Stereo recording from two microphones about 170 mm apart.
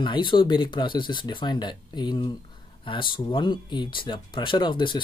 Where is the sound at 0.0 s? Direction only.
30° left (ahead or behind).